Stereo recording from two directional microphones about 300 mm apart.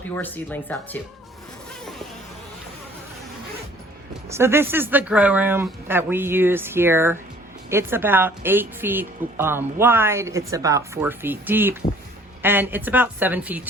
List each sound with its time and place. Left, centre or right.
0.2 s speech: centre
4.3 s a woman's voice: centre